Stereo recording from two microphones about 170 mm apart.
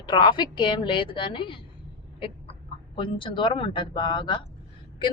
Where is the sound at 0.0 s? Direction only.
25° left (ahead or behind).